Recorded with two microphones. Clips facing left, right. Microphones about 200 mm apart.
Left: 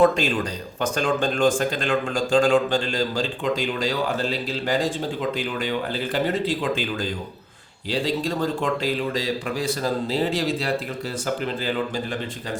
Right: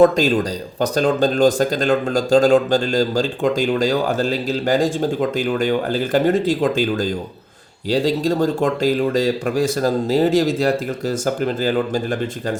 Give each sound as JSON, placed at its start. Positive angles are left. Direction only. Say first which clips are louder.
{"t": 0.0, "sound": "speech", "louder": "right 5 dB", "side_deg": -40}